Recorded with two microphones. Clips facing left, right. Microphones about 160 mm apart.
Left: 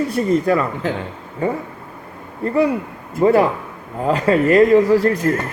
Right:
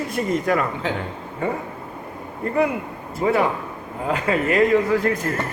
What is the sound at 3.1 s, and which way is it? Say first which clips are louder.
A man's voice: left 6 dB; 40° left (ahead or behind).